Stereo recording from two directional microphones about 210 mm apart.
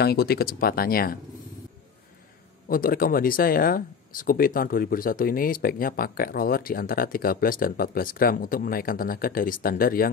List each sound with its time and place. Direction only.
0.0 s speech: 50° left (ahead or behind)
2.7 s speech: 45° left (ahead or behind)